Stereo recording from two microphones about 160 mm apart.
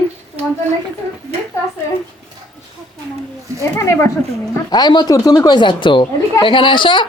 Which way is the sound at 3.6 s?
20° left (ahead or behind).